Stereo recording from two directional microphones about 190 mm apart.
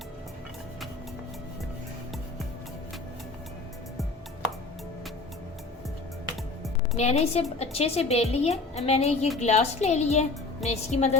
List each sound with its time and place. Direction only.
6.9 s a woman's voice: 35° left (ahead or behind)